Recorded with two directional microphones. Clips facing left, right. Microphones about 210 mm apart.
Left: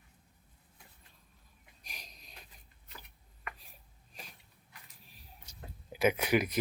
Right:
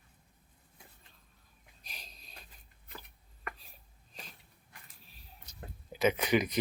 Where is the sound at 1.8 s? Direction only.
15° left (ahead or behind).